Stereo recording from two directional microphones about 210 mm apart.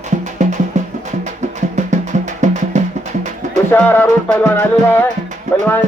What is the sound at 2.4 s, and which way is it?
Music, 35° right (ahead or behind).